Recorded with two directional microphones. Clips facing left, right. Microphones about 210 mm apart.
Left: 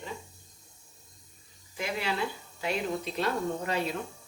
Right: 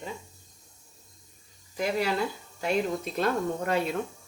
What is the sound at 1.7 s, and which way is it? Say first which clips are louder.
Speech: right 5 dB; 40° right (ahead or behind).